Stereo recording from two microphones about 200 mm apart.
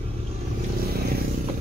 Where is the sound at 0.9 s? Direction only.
50° right (ahead or behind).